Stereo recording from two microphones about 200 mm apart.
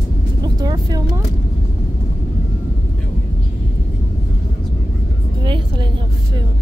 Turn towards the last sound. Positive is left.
turn(degrees=-25)  # may be behind; listen again after turning